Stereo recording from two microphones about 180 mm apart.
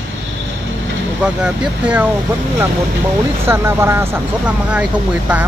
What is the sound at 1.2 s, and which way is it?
Speech, 5° right (ahead or behind).